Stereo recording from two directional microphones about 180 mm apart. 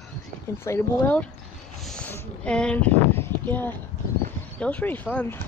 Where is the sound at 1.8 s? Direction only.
5° left (ahead or behind).